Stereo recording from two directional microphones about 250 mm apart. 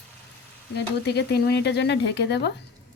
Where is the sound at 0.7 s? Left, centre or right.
Left.